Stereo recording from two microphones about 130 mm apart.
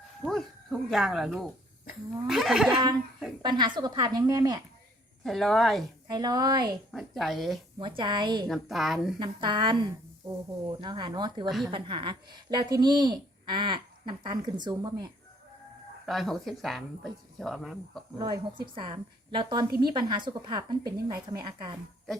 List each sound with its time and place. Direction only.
0.3 s speech: centre (ahead or behind)
3.4 s a woman's voice: 35° right (ahead or behind)
5.2 s speech: centre (ahead or behind)
6.1 s a woman's voice: 30° right (ahead or behind)
6.9 s speech: centre (ahead or behind)
7.8 s a woman's voice: 35° right (ahead or behind)
8.4 s speech: centre (ahead or behind)
9.1 s a woman's voice: 35° right (ahead or behind)
16.0 s speech: centre (ahead or behind)
18.2 s a woman's voice: 35° right (ahead or behind)